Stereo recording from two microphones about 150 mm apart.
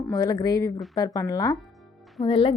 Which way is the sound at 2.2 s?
35° left (ahead or behind).